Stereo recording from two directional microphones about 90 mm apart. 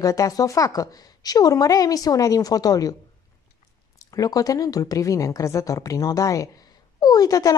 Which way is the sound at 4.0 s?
45° left (ahead or behind).